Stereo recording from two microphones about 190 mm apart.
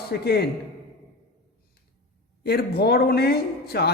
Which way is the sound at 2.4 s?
55° left (ahead or behind).